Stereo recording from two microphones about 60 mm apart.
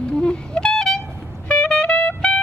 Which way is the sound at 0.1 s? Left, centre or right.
Centre.